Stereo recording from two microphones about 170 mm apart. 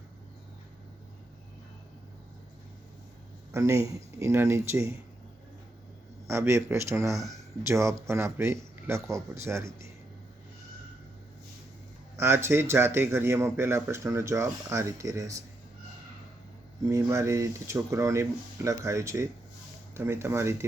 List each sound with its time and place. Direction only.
3.5 s speech: 15° right (ahead or behind)
6.2 s speech: 15° right (ahead or behind)
7.1 s speech: centre (ahead or behind)
7.7 s speech: 15° right (ahead or behind)
12.1 s speech: 15° right (ahead or behind)
16.8 s speech: 15° right (ahead or behind)